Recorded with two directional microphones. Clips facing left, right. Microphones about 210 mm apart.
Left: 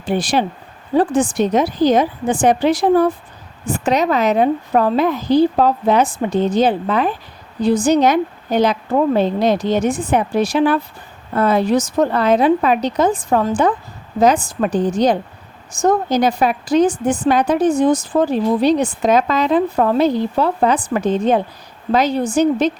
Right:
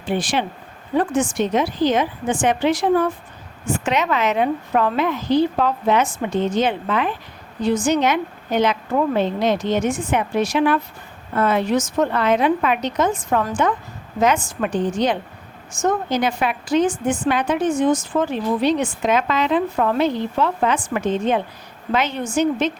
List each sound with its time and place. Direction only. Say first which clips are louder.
0.0 s speech: left 4 dB; 40° left (ahead or behind)